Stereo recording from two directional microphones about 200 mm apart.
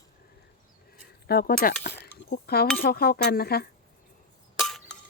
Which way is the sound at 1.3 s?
50° left (ahead or behind).